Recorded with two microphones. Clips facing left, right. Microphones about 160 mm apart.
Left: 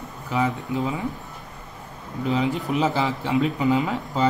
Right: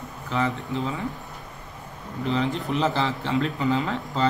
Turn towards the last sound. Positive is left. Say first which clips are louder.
# left 3 dB
turn(degrees=15)  # may be behind; listen again after turning